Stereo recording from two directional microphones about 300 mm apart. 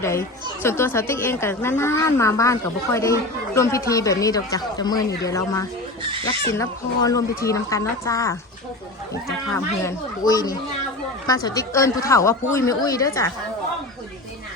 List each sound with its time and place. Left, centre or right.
0.0 s speech: centre
6.0 s speech: centre
6.5 s speech: centre
9.5 s speech: centre